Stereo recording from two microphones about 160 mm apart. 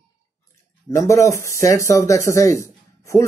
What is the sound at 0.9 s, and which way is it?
Speech, 20° left (ahead or behind).